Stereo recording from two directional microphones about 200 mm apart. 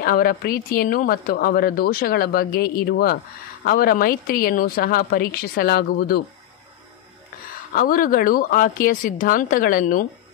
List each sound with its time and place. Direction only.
0.0 s a woman's voice: 45° left (ahead or behind)
7.7 s a woman's voice: 45° left (ahead or behind)